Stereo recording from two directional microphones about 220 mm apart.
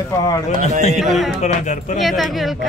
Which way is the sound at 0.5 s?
30° left (ahead or behind).